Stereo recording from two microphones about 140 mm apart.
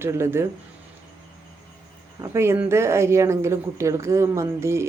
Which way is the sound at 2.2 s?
20° right (ahead or behind).